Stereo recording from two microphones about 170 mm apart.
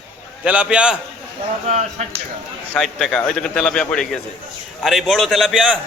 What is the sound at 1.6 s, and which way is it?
Speech, 40° right (ahead or behind).